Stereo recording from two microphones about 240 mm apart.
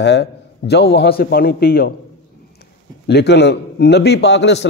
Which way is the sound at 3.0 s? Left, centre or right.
Left.